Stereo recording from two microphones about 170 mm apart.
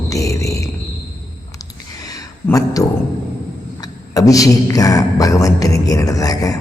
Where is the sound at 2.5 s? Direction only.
20° left (ahead or behind).